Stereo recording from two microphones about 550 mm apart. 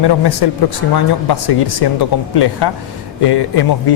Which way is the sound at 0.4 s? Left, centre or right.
Left.